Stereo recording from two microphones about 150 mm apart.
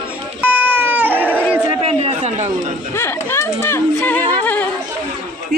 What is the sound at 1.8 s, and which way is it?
Chatter, 45° right (ahead or behind).